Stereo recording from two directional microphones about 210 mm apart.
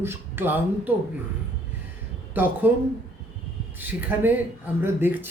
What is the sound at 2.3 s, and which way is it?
Speech, 10° right (ahead or behind).